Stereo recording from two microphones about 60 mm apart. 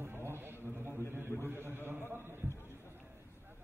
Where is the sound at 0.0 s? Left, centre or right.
Right.